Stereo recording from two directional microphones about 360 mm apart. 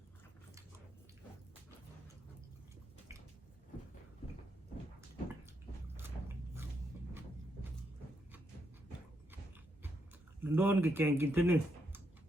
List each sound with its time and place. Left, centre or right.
6.0 s biting: centre
10.4 s speech: centre